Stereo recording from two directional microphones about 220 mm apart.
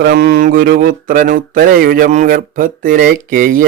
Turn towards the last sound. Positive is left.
turn(degrees=-40)  # may be behind; listen again after turning